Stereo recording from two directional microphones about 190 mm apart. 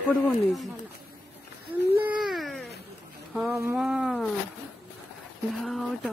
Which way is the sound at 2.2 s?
Centre (ahead or behind).